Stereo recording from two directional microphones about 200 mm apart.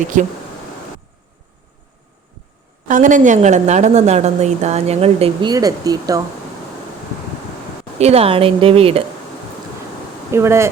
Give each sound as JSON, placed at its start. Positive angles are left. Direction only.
{"t": 0.1, "sound": "a woman's voice", "side_deg": -40}
{"t": 2.8, "sound": "a woman's voice", "side_deg": -40}
{"t": 7.9, "sound": "speech", "side_deg": -30}
{"t": 10.3, "sound": "speech", "side_deg": -15}